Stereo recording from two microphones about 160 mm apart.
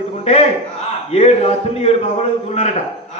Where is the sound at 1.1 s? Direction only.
40° left (ahead or behind).